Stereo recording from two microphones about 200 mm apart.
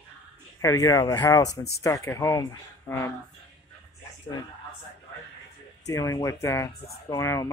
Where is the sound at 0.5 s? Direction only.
15° left (ahead or behind).